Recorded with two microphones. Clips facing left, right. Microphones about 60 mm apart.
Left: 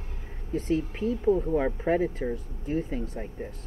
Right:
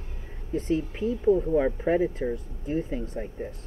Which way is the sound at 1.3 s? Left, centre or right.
Centre.